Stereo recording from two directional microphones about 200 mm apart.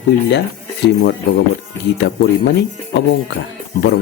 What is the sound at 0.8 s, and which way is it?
Speech, 60° left (ahead or behind).